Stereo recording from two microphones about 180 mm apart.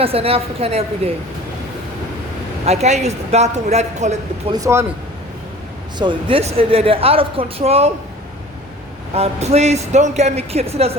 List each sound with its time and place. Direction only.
0.0 s speech: 35° right (ahead or behind)
2.6 s speech: 40° right (ahead or behind)
4.5 s speech: 15° right (ahead or behind)
6.0 s speech: 30° right (ahead or behind)
9.1 s speech: 35° right (ahead or behind)